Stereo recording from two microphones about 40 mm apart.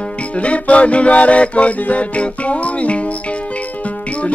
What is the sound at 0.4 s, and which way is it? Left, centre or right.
Music, left.